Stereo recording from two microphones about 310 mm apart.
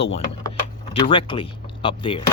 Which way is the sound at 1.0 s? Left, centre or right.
Centre.